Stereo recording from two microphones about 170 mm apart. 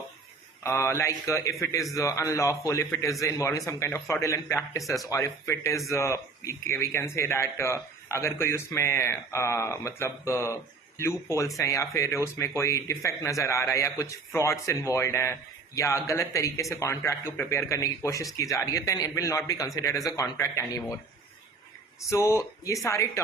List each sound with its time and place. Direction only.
0.6 s speech: 15° left (ahead or behind)
4.8 s speech: centre (ahead or behind)
5.0 s a man's voice: 20° left (ahead or behind)
22.1 s speech: 15° left (ahead or behind)